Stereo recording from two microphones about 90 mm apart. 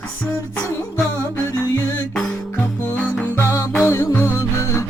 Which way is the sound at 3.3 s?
30° left (ahead or behind).